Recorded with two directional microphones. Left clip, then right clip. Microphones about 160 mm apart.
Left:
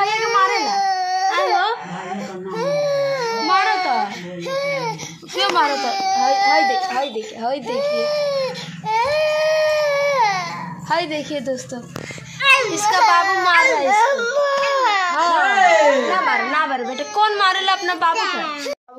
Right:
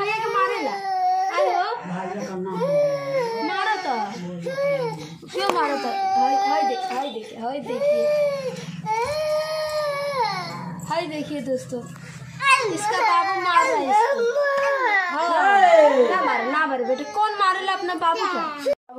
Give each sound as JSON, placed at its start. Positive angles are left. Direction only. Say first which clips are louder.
{"t": 0.0, "sound": "baby cry", "louder": "left 5 dB", "side_deg": 45}
{"t": 4.5, "sound": "a sound", "louder": "left 1 dB", "side_deg": 10}
{"t": 5.3, "sound": "a sound", "louder": "left 5 dB", "side_deg": -5}
{"t": 6.2, "sound": "baby cry", "louder": "left 8 dB", "side_deg": 50}
{"t": 7.4, "sound": "speech", "louder": "left 1 dB", "side_deg": 55}
{"t": 8.8, "sound": "baby cry", "louder": "left 6 dB", "side_deg": 35}
{"t": 12.7, "sound": "a child's voice", "louder": "left 5 dB", "side_deg": 10}
{"t": 14.8, "sound": "baby cry", "louder": "left 4 dB", "side_deg": 0}
{"t": 15.3, "sound": "speech", "louder": "right 1 dB", "side_deg": 20}